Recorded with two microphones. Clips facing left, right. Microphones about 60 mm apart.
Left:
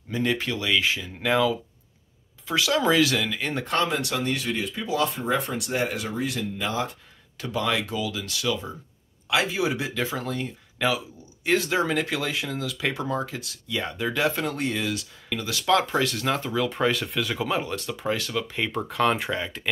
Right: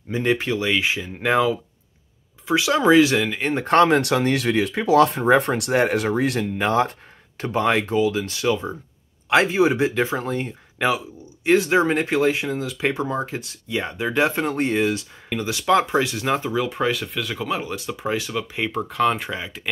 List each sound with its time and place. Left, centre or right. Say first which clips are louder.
0.1 s speech: right 5 dB; right
3.6 s speech: right 11 dB; right
7.3 s speech: right 6 dB; right; by 19.7 s centre